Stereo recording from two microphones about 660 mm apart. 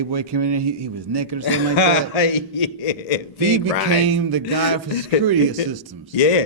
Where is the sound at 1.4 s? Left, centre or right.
Left.